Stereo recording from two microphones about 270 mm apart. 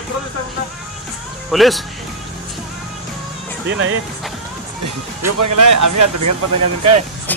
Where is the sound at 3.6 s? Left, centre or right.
Right.